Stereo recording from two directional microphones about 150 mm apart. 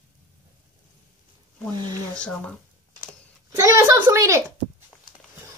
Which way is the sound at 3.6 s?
20° right (ahead or behind).